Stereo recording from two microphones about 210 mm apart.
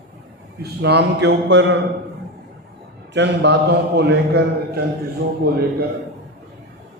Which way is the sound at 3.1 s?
55° right (ahead or behind).